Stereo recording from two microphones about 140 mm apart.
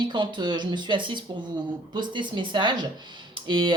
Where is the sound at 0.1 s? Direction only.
35° right (ahead or behind).